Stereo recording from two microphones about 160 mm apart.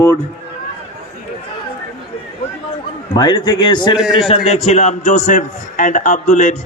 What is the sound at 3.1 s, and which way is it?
Speech, 25° left (ahead or behind).